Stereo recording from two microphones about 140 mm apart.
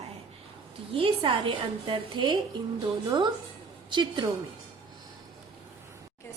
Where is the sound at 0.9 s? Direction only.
40° right (ahead or behind).